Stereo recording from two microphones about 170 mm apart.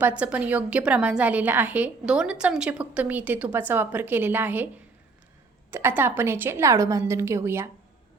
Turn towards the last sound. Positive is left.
turn(degrees=-15)  # may be behind; listen again after turning